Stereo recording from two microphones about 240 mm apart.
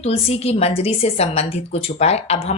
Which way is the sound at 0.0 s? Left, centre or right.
Left.